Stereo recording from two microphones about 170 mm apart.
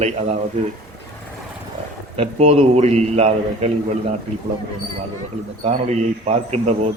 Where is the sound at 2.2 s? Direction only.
40° right (ahead or behind).